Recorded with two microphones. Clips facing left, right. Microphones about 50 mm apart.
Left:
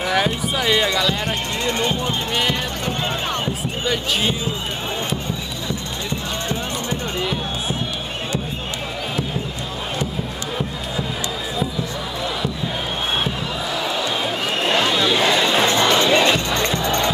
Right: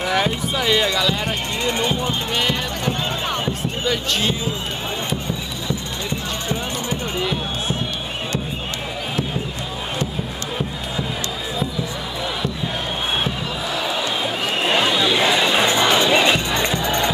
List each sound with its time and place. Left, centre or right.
0.0 s speech: centre
1.2 s speech: centre
3.8 s speech: centre
13.8 s a sound: centre
15.2 s crowd: centre